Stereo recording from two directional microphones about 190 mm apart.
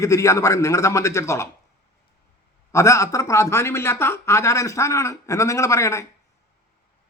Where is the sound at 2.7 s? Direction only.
15° left (ahead or behind).